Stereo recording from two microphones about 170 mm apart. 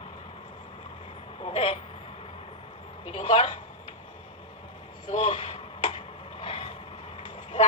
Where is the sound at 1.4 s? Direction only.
35° left (ahead or behind).